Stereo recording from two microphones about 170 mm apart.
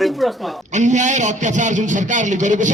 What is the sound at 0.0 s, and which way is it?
Speech, centre (ahead or behind).